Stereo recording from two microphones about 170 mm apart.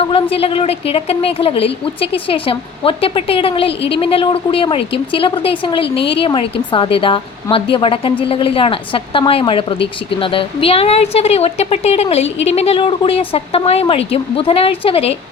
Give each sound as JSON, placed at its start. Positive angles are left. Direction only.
{"t": 0.1, "sound": "speech", "side_deg": 35}